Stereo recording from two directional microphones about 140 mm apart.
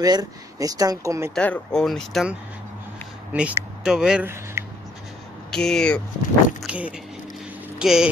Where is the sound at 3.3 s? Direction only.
10° right (ahead or behind).